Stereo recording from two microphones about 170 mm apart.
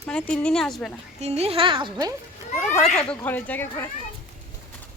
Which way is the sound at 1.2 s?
35° right (ahead or behind).